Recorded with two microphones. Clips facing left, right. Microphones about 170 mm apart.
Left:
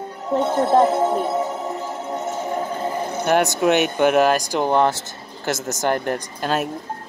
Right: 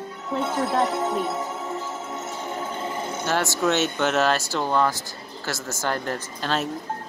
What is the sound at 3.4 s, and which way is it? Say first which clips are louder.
Speech: left 5 dB; 15° left (ahead or behind).